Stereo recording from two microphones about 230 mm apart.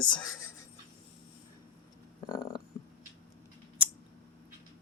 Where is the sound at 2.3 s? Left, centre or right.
Centre.